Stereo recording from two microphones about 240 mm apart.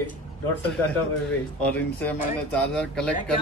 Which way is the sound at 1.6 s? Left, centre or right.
Centre.